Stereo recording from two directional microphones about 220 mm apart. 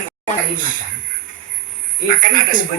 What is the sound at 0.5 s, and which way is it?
Speech, 40° right (ahead or behind).